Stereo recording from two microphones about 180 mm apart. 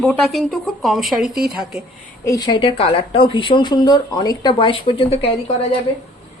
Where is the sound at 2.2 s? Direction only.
20° left (ahead or behind).